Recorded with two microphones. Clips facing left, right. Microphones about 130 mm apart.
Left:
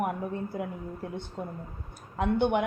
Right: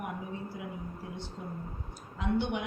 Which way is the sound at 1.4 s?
60° left (ahead or behind).